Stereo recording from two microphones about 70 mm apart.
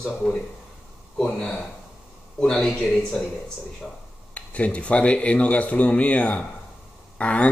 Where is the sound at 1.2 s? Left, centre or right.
Centre.